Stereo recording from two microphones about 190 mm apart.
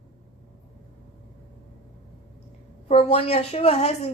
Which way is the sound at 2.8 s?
30° left (ahead or behind).